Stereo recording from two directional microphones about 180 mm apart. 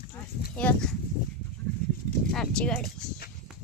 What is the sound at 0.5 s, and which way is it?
Speech, 5° left (ahead or behind).